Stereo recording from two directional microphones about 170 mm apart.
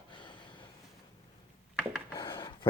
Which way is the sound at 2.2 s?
25° left (ahead or behind).